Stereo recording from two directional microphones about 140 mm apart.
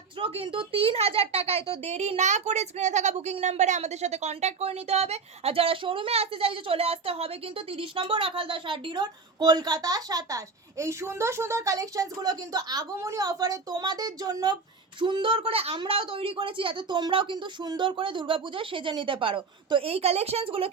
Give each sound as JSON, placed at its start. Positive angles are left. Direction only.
{"t": 0.2, "sound": "speech", "side_deg": -40}